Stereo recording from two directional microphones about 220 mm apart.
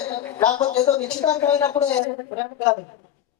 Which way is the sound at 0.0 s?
15° left (ahead or behind).